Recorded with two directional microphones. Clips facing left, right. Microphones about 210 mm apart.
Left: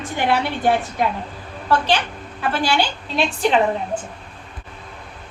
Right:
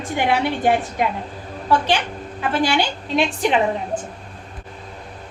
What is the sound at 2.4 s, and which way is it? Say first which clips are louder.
Speech: right 1 dB; 15° right (ahead or behind).